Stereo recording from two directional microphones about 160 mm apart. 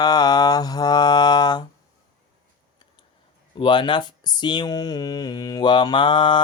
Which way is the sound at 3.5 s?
30° left (ahead or behind).